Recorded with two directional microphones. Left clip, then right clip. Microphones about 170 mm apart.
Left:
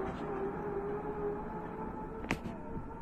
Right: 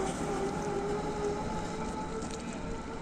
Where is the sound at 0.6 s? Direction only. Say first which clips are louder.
Right 4 dB; 85° right.